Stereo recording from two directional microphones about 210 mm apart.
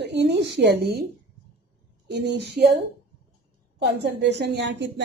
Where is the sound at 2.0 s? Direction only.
55° right (ahead or behind).